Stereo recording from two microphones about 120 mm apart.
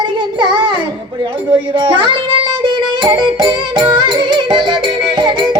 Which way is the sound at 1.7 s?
45° right (ahead or behind).